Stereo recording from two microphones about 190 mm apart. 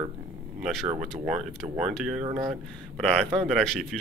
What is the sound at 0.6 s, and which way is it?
Speech, centre (ahead or behind).